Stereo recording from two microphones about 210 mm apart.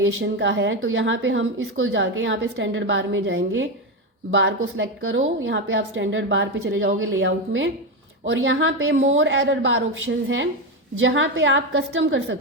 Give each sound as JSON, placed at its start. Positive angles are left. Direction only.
{"t": 0.2, "sound": "a woman's voice", "side_deg": -60}